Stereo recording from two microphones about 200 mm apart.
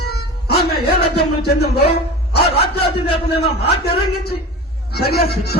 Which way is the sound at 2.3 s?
55° left (ahead or behind).